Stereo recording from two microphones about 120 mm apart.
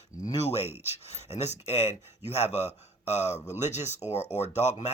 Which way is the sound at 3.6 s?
70° left (ahead or behind).